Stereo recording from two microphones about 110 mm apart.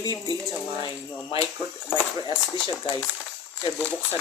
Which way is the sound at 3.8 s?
15° left (ahead or behind).